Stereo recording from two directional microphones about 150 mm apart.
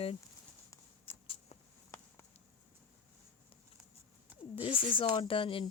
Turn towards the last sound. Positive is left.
turn(degrees=35)  # may be behind; listen again after turning